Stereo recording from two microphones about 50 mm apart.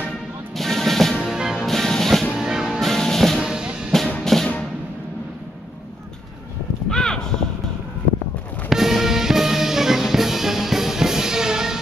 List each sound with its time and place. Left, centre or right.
0.6 s music: centre
1.2 s music: centre
1.7 s music: centre
2.3 s music: centre
2.8 s music: centre
3.4 s music: centre
4.2 s music: centre
6.9 s a sound: centre
8.6 s music: centre